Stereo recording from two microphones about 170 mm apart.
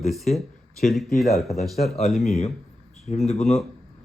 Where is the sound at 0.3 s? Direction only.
45° left (ahead or behind).